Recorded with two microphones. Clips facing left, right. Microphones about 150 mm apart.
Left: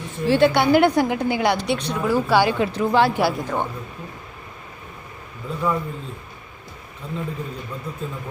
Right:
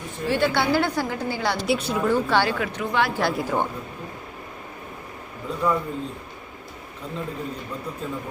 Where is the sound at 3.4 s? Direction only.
5° right (ahead or behind).